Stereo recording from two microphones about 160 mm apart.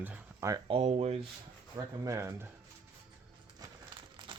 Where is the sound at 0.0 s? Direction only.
15° right (ahead or behind).